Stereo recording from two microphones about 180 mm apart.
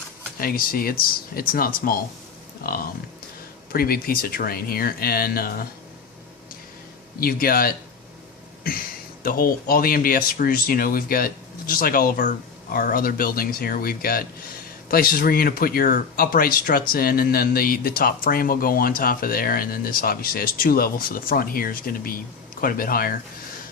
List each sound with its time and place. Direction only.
0.3 s speech: 55° left (ahead or behind)
7.2 s speech: 55° left (ahead or behind)
9.2 s speech: 55° left (ahead or behind)